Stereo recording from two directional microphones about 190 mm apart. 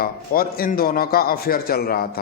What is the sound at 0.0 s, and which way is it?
A man's voice, 50° left (ahead or behind).